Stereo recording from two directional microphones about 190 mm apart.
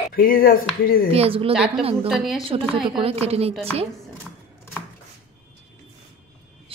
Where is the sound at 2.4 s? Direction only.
30° right (ahead or behind).